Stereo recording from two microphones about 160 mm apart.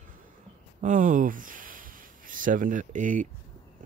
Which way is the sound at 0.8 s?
50° right (ahead or behind).